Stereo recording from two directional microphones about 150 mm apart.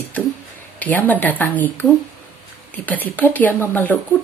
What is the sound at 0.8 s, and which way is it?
A woman's voice, 10° left (ahead or behind).